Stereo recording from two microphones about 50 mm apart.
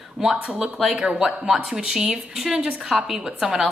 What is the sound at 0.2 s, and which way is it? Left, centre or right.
A woman's voice, centre.